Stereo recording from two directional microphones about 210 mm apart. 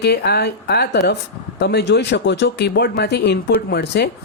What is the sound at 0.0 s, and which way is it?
Speech, 50° left (ahead or behind).